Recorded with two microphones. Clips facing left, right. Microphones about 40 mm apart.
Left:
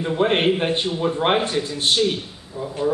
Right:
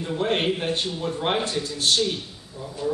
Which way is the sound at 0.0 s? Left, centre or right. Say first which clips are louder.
Left 5 dB; left.